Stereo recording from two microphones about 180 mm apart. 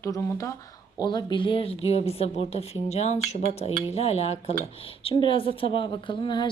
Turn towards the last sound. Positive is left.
turn(degrees=25)  # may be behind; listen again after turning